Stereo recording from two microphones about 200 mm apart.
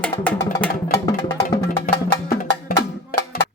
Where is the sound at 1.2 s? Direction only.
15° left (ahead or behind).